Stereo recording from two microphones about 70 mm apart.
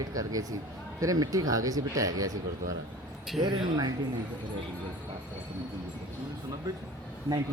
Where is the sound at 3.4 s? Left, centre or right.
Right.